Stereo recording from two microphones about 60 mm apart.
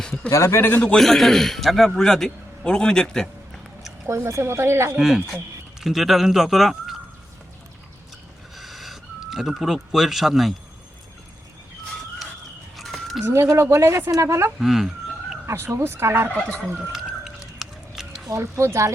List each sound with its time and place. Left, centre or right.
0.0 s a sound: centre
0.3 s a man's voice: left
0.9 s a man's voice: centre
4.0 s speech: right
4.9 s speech: centre
8.5 s a sound: centre
12.7 s a sound: centre
13.2 s a woman's voice: right
14.6 s chicken: centre
15.4 s speech: right
16.7 s a sound: centre
18.5 s speech: right